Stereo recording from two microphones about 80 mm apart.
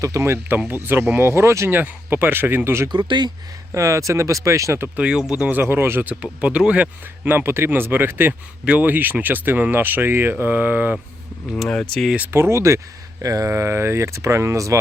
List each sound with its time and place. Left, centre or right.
0.0 s speech: right
2.9 s speech: right
3.7 s speech: right
4.9 s speech: centre
5.5 s speech: right
6.4 s speech: centre
7.3 s speech: right
11.7 s speech: centre
12.3 s speech: right
13.5 s speech: right